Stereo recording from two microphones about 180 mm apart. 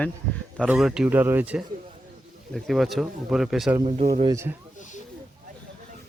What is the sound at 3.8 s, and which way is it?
Speech, 35° right (ahead or behind).